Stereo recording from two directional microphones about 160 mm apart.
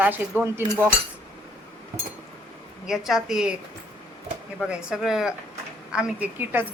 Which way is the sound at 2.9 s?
Centre (ahead or behind).